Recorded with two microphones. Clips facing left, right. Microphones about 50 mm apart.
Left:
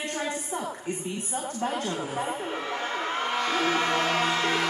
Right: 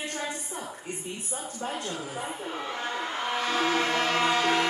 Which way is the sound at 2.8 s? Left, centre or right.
Left.